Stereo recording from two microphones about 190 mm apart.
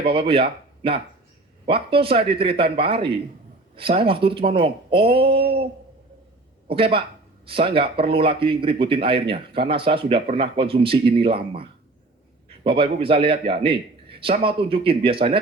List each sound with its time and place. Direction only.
0.0 s speech: 30° right (ahead or behind)
6.7 s speech: 30° right (ahead or behind)